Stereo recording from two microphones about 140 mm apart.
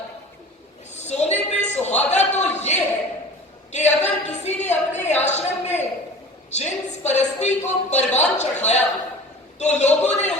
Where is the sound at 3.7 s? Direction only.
55° left (ahead or behind).